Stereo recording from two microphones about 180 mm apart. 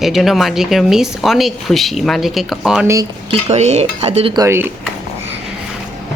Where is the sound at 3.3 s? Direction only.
40° right (ahead or behind).